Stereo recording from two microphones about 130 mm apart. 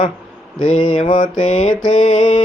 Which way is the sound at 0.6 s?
75° left (ahead or behind).